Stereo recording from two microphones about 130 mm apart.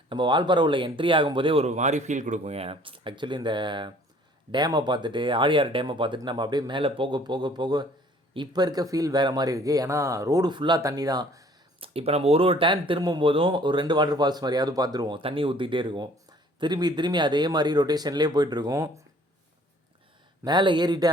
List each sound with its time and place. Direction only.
0.1 s speech: 35° right (ahead or behind)
1.6 s speech: 60° right (ahead or behind); by 11.4 s 30° right (ahead or behind)
11.8 s speech: 50° right (ahead or behind); by 15.2 s 30° right (ahead or behind)
15.2 s speech: 45° right (ahead or behind); by 19.0 s 25° right (ahead or behind)
20.4 s speech: 35° right (ahead or behind)